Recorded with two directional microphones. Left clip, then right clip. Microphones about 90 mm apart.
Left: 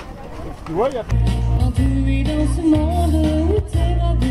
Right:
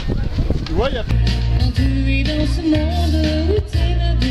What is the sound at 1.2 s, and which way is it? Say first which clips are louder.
Music: right 1 dB; 25° right (ahead or behind).